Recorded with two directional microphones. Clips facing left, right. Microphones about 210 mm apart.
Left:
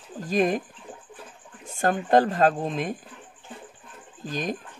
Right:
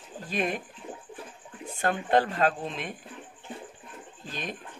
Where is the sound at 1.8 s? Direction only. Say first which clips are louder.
Left 4 dB; 40° left (ahead or behind).